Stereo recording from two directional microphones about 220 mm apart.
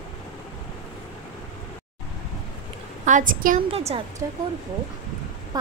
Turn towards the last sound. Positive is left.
turn(degrees=-15)  # may be behind; listen again after turning